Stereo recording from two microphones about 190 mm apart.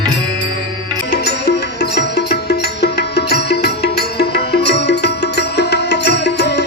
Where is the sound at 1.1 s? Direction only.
60° left (ahead or behind).